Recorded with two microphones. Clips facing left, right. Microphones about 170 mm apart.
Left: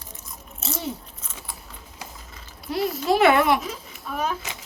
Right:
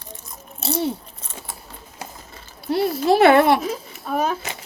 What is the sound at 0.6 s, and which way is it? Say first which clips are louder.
Biting: right 7 dB; 30° right (ahead or behind).